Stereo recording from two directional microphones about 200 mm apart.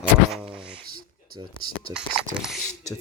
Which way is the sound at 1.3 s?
20° right (ahead or behind).